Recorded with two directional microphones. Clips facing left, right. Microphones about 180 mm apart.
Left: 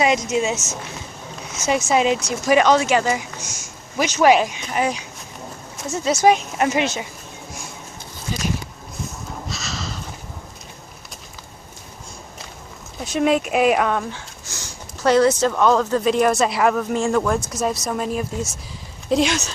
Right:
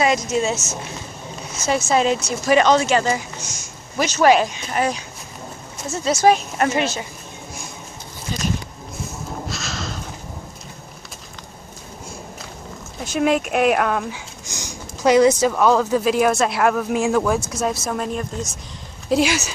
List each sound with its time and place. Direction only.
0.0 s speech: 15° left (ahead or behind)
1.9 s speech: 10° left (ahead or behind)
6.0 s speech: 15° left (ahead or behind)
8.3 s speech: 10° left (ahead or behind)
9.5 s a sound: centre (ahead or behind)
13.0 s speech: centre (ahead or behind)
14.5 s speech: 15° right (ahead or behind)